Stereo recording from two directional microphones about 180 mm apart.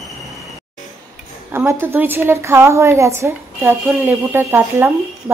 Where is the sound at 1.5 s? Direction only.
15° right (ahead or behind).